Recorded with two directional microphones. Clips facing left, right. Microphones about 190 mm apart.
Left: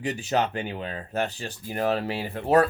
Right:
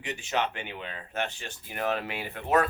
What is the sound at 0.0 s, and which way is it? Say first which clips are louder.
Speech: left 5 dB; 35° left (ahead or behind).